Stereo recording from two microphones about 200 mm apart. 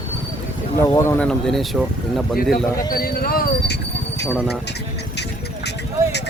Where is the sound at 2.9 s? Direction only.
45° left (ahead or behind).